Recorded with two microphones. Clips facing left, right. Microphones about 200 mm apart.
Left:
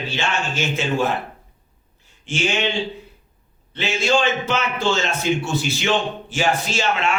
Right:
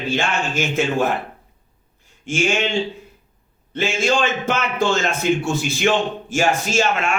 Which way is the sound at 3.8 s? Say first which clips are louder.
Right 1 dB; 50° right (ahead or behind).